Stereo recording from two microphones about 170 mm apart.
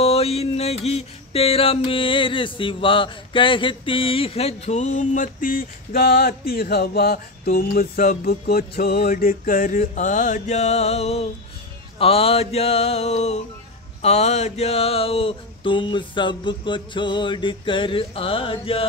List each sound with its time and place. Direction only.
0.0 s mantra: 35° left (ahead or behind)